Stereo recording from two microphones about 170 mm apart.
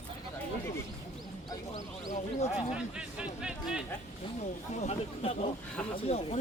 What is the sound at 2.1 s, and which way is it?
Speech, 40° left (ahead or behind).